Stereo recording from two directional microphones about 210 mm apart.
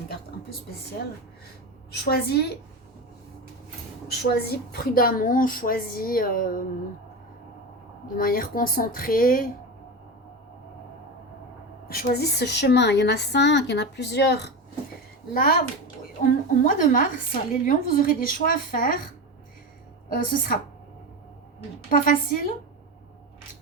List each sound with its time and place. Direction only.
2.0 s a woman's voice: 50° left (ahead or behind)
4.1 s a woman's voice: 50° left (ahead or behind)
8.0 s a woman's voice: 40° left (ahead or behind)
11.9 s a woman's voice: 45° left (ahead or behind)
20.1 s a woman's voice: 40° left (ahead or behind)
21.8 s a woman's voice: 40° left (ahead or behind)